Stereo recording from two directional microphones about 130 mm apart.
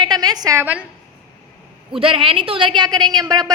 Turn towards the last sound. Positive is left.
turn(degrees=-30)  # may be behind; listen again after turning